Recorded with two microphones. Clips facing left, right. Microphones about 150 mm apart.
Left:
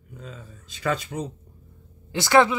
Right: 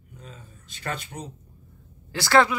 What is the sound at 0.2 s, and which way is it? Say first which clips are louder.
Speech: left 5 dB; 90° left.